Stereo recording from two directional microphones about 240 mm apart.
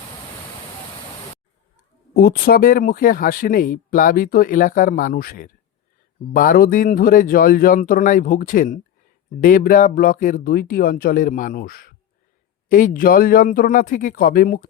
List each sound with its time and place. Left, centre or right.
2.1 s speech: left